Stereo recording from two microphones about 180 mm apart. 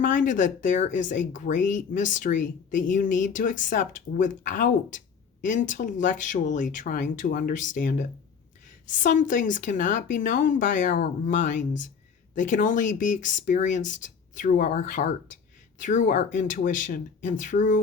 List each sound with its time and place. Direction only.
0.0 s speech: 45° left (ahead or behind)